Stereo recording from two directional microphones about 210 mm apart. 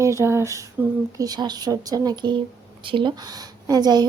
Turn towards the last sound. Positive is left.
turn(degrees=-20)  # may be behind; listen again after turning